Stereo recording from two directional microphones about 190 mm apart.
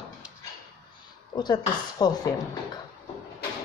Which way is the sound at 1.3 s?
20° left (ahead or behind).